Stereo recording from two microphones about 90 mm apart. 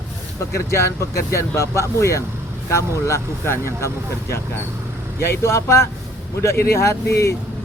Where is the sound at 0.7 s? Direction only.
30° left (ahead or behind).